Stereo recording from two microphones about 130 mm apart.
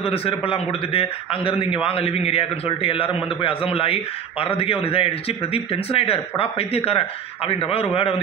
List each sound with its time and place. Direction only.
0.0 s a man's voice: 45° left (ahead or behind)